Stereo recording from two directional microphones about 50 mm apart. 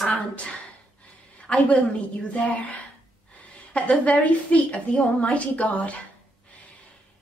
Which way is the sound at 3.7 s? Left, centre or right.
Left.